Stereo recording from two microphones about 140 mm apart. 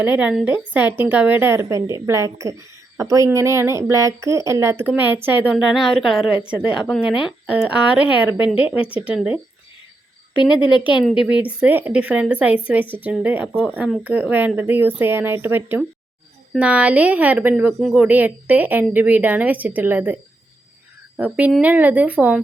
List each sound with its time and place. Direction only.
0.0 s a woman's voice: 10° right (ahead or behind)
10.8 s a woman's voice: 35° left (ahead or behind)
11.0 s speech: 5° right (ahead or behind)
17.7 s speech: centre (ahead or behind)
18.0 s speech: 10° right (ahead or behind)
21.2 s speech: 10° right (ahead or behind)